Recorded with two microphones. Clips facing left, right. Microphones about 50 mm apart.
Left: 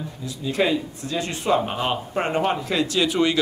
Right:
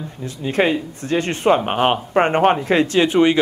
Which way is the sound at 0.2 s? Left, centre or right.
Right.